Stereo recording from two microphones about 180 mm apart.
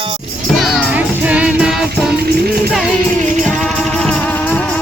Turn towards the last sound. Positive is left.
turn(degrees=5)  # may be behind; listen again after turning